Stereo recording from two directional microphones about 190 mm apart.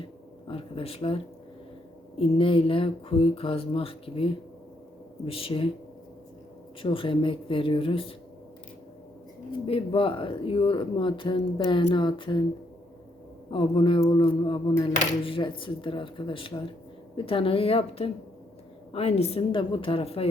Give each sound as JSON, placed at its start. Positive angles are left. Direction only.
{"t": 0.4, "sound": "a sound", "side_deg": 30}
{"t": 2.1, "sound": "speech", "side_deg": 30}
{"t": 6.8, "sound": "speech", "side_deg": 25}
{"t": 9.6, "sound": "speech", "side_deg": 30}
{"t": 13.5, "sound": "speech", "side_deg": 25}